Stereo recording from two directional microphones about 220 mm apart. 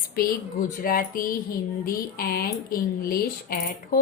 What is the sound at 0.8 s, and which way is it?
A woman's voice, 40° left (ahead or behind).